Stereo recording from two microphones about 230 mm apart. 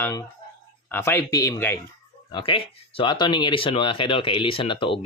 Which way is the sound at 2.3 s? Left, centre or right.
Left.